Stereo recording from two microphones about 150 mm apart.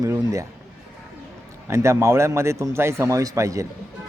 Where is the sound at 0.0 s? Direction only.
20° right (ahead or behind).